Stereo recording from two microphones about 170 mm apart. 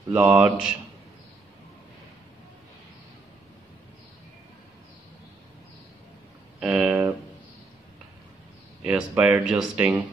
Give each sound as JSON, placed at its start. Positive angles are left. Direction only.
{"t": 0.1, "sound": "speech", "side_deg": -10}
{"t": 6.6, "sound": "speech", "side_deg": -10}
{"t": 8.8, "sound": "speech", "side_deg": -10}